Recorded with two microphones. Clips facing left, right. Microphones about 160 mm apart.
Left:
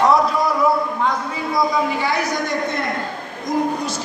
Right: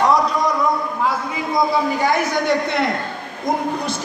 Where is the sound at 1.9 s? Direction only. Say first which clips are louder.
Right 3 dB; 45° right (ahead or behind).